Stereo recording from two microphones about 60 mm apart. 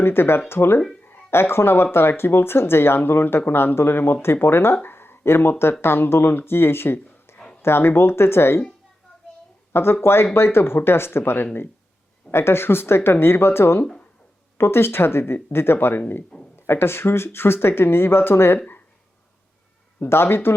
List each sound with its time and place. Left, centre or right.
0.0 s speech: left
7.3 s a sound: centre
7.6 s speech: left
9.7 s speech: left
12.3 s speech: left
20.0 s speech: left